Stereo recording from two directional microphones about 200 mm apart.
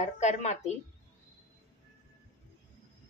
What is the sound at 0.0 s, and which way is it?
Speech, 35° left (ahead or behind).